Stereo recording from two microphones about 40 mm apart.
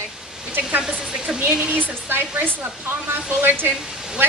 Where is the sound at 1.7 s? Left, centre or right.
Right.